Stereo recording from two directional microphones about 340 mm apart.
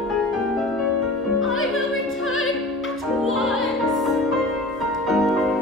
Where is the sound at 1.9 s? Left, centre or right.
Left.